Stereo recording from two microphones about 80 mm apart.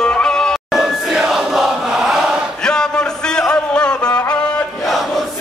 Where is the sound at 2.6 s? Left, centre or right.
Centre.